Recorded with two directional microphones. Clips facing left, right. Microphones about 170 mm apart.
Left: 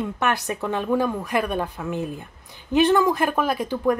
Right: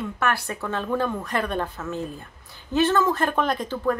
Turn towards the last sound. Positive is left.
turn(degrees=10)  # may be behind; listen again after turning